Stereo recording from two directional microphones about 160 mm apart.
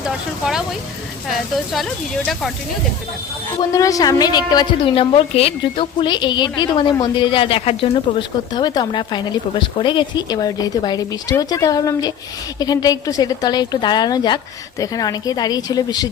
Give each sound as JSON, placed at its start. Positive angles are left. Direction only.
{"t": 0.0, "sound": "speech", "side_deg": -5}
{"t": 3.6, "sound": "speech", "side_deg": 20}